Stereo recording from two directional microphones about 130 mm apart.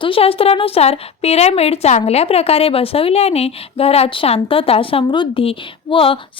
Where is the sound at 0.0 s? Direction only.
45° left (ahead or behind).